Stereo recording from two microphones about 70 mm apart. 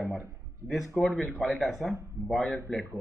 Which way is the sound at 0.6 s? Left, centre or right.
Right.